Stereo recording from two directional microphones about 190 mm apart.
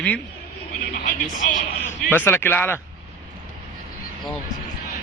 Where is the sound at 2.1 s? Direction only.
10° left (ahead or behind).